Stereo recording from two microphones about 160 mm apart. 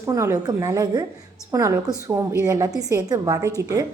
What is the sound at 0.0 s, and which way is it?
A woman's voice, 20° right (ahead or behind).